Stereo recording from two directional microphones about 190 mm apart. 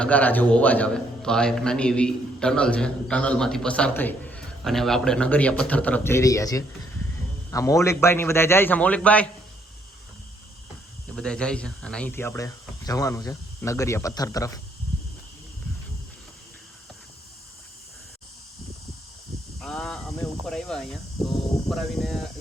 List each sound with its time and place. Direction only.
0.0 s a man's voice: 10° left (ahead or behind)
11.1 s speech: 5° left (ahead or behind)
19.5 s a man's voice: centre (ahead or behind)